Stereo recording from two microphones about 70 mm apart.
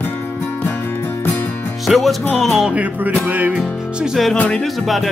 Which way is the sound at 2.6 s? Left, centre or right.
Right.